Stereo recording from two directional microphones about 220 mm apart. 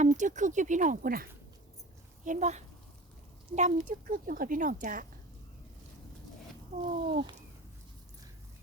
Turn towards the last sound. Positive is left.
turn(degrees=-25)  # may be behind; listen again after turning